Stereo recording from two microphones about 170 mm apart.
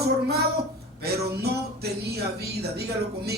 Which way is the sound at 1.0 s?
70° right (ahead or behind).